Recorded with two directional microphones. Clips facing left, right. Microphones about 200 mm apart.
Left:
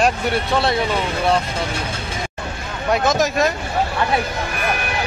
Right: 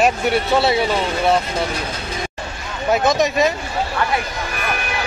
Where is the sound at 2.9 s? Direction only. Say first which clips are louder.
Right 1 dB; centre (ahead or behind).